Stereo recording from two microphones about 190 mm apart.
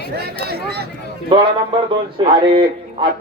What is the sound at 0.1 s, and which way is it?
Speech, 55° right (ahead or behind).